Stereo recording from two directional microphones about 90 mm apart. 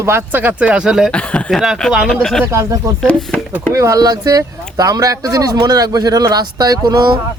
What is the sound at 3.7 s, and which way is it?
Speech, 35° right (ahead or behind).